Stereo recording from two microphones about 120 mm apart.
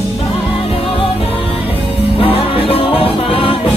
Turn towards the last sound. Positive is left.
turn(degrees=50)  # may be behind; listen again after turning